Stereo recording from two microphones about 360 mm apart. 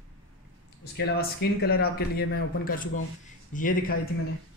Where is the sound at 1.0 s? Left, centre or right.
Left.